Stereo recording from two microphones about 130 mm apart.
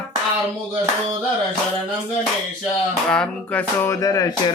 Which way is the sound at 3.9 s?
25° left (ahead or behind).